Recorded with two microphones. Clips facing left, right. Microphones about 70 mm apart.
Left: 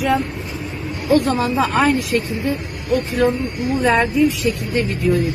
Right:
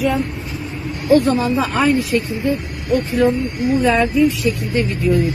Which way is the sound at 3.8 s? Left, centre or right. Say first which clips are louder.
Even; left.